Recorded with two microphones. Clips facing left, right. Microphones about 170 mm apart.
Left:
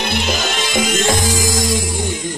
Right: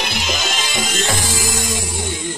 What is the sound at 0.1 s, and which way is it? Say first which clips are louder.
Music: left 4 dB; 55° left (ahead or behind).